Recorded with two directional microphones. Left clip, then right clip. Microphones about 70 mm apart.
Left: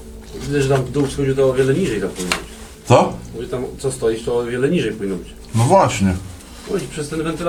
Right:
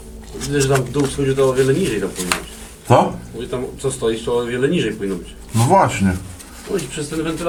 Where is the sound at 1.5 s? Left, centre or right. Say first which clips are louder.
Right 1 dB; centre.